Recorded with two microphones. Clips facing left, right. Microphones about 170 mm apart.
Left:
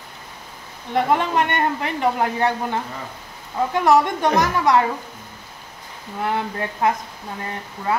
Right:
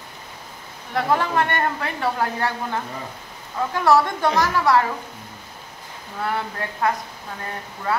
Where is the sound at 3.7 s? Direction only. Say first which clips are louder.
Left 1 dB; 20° left (ahead or behind).